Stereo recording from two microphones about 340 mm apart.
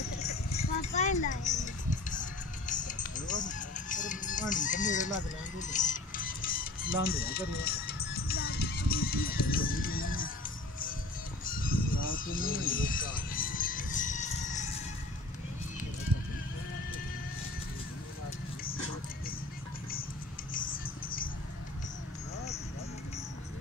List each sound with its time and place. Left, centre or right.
0.2 s music: centre
11.4 s honk: left